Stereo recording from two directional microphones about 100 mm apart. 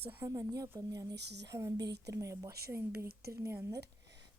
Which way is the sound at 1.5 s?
30° right (ahead or behind).